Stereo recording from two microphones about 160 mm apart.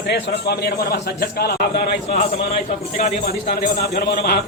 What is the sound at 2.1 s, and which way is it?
A man's voice, 40° left (ahead or behind).